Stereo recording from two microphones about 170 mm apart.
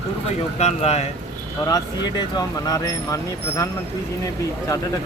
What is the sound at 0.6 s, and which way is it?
Speech, 40° left (ahead or behind).